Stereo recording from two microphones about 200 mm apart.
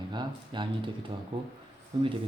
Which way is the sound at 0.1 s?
20° right (ahead or behind).